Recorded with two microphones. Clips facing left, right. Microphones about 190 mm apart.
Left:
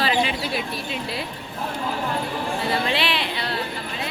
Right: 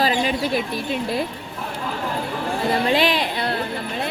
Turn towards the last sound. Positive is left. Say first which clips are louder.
# right 4 dB
turn(degrees=-50)  # may be behind; listen again after turning